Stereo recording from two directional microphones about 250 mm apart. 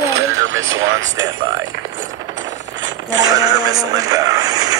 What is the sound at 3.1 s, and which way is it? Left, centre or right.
Speech, centre.